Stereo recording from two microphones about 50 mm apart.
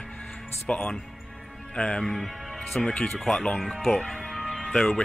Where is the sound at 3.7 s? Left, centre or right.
Centre.